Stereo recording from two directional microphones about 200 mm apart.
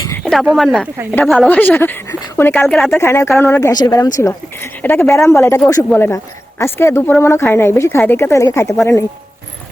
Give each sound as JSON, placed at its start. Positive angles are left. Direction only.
{"t": 0.2, "sound": "speech", "side_deg": 0}
{"t": 3.0, "sound": "speech", "side_deg": 15}